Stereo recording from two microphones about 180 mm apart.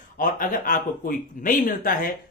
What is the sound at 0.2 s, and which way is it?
Speech, 50° left (ahead or behind).